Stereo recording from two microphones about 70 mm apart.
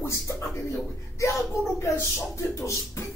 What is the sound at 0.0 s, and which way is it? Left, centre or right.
Speech, left.